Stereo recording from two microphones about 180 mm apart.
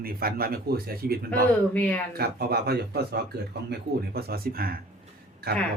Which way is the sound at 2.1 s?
60° right (ahead or behind).